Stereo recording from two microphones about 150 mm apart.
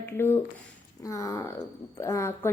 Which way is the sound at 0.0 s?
15° left (ahead or behind).